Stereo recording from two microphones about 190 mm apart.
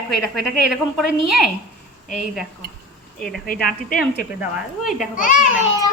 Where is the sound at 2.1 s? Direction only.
Centre (ahead or behind).